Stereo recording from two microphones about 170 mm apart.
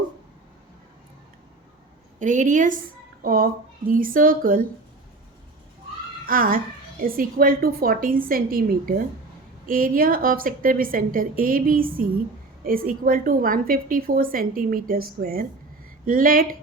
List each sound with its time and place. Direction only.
2.1 s a woman's voice: 45° right (ahead or behind)
6.2 s a child's voice: 55° right (ahead or behind)